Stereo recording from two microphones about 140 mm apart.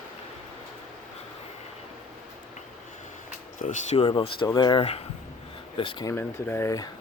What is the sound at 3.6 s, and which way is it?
Speech, 65° left (ahead or behind).